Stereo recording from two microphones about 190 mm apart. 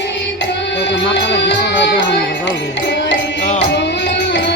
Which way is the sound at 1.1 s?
65° left (ahead or behind).